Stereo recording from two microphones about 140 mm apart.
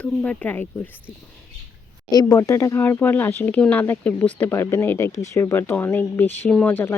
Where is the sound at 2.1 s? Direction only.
25° left (ahead or behind).